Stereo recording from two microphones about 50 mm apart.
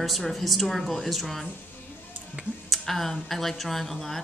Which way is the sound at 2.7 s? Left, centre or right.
Centre.